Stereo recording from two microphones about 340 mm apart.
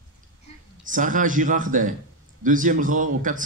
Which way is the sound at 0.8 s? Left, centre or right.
Right.